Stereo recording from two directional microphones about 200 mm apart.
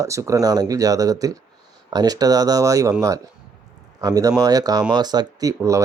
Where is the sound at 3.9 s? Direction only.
20° right (ahead or behind).